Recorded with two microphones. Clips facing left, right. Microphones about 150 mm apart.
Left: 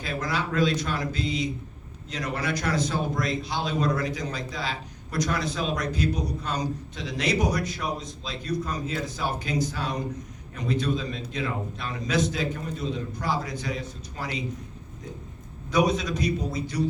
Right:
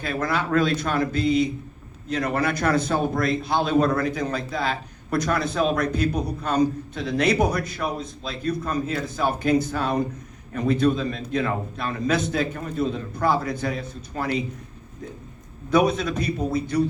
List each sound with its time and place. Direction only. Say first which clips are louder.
0.0 s a man's voice: right 4 dB; 55° right (ahead or behind)
15.7 s a man's voice: right 3 dB; 55° right (ahead or behind)